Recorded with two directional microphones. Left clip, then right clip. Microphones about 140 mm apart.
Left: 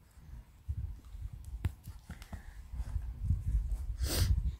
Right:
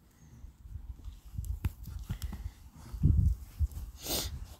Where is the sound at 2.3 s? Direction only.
5° left (ahead or behind).